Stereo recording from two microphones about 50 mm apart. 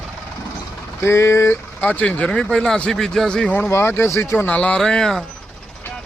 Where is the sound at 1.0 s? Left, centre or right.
Left.